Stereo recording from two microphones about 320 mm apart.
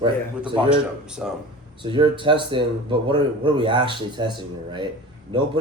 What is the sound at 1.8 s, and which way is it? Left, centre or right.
A man's voice, centre.